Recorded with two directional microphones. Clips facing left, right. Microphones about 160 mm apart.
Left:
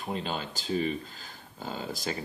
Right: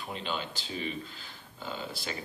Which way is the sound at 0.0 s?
40° left (ahead or behind).